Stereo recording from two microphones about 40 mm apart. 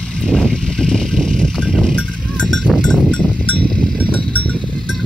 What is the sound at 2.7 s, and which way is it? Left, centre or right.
Sheep, right.